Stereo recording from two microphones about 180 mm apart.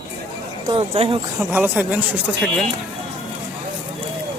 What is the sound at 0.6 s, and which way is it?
Speech, 30° right (ahead or behind).